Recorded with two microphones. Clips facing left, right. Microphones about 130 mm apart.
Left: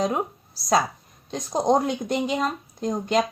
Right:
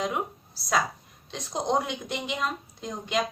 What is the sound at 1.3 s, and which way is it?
Speech, 45° left (ahead or behind).